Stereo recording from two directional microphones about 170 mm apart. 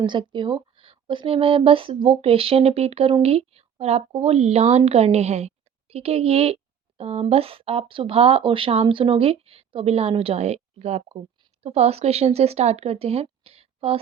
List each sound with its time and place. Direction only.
0.0 s a woman's voice: 30° right (ahead or behind)